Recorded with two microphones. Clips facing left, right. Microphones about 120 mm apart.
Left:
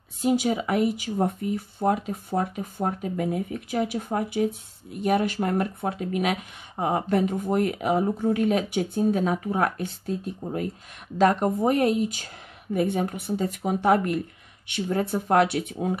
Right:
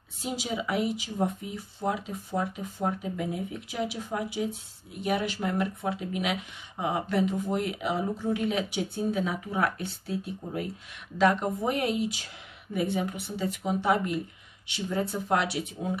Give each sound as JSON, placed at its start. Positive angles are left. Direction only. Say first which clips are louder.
{"t": 0.2, "sound": "speech", "louder": "left 9 dB", "side_deg": 55}